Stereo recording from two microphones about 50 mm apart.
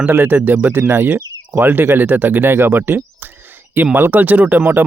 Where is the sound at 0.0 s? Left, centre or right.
Right.